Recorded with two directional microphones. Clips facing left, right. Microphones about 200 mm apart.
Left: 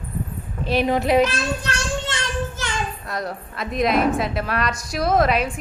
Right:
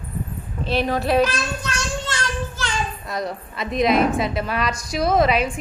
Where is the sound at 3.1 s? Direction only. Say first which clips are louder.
Right 1 dB; centre (ahead or behind).